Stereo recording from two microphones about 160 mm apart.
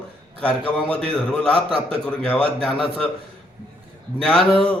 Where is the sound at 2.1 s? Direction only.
5° left (ahead or behind).